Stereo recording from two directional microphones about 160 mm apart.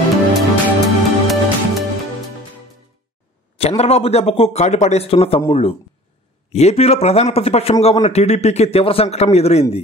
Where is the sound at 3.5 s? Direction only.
40° left (ahead or behind).